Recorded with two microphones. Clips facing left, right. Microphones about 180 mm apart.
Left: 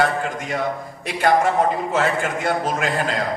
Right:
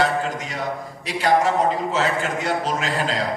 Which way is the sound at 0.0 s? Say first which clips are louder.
Left 1 dB; 50° left (ahead or behind).